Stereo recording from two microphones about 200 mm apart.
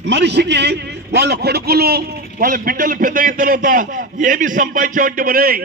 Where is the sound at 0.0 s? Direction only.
60° right (ahead or behind).